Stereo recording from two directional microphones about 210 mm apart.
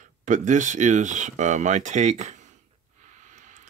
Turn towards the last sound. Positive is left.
turn(degrees=-35)  # may be behind; listen again after turning